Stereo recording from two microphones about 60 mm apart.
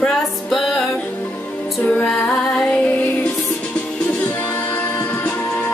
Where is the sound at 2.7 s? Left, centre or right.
Left.